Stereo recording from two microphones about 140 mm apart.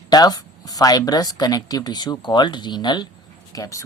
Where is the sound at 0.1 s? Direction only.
30° left (ahead or behind).